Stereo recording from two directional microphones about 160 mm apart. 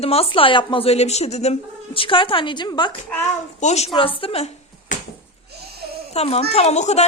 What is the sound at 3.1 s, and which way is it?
A woman's voice, 45° left (ahead or behind).